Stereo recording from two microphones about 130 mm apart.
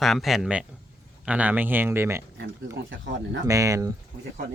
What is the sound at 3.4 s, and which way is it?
Speech, 25° right (ahead or behind).